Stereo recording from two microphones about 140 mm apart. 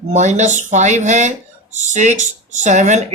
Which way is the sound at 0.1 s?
55° right (ahead or behind).